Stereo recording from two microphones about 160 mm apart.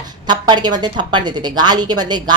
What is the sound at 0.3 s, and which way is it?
Speech, 25° right (ahead or behind).